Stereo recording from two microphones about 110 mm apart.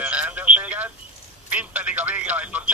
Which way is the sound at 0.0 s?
15° right (ahead or behind).